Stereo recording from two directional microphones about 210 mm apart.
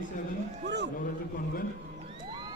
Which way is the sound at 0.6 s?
55° right (ahead or behind).